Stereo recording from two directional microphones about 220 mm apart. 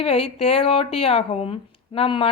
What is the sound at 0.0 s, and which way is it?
Speech, 25° left (ahead or behind).